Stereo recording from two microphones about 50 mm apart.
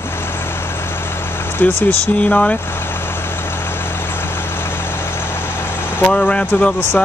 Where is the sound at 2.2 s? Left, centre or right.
Left.